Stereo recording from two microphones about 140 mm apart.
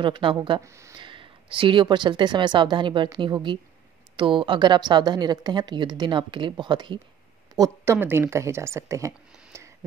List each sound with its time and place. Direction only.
0.0 s a woman's voice: 35° right (ahead or behind)
0.6 s speech: 20° right (ahead or behind)
0.9 s a woman's voice: 35° right (ahead or behind); by 9.1 s 20° right (ahead or behind)
9.5 s a sound: 20° right (ahead or behind)